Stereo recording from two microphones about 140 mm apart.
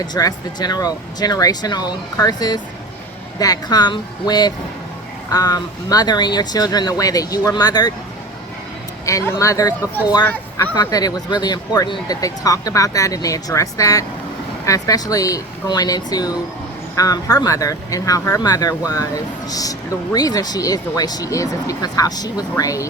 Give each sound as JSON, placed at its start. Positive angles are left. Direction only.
{"t": 0.1, "sound": "speech", "side_deg": 30}
{"t": 9.0, "sound": "speech", "side_deg": 20}
{"t": 10.9, "sound": "speech", "side_deg": 25}